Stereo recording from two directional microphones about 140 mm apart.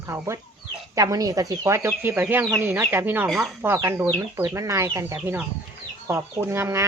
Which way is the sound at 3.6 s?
15° right (ahead or behind).